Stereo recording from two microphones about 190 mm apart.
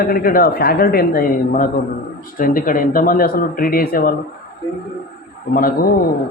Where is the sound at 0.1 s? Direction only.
50° left (ahead or behind).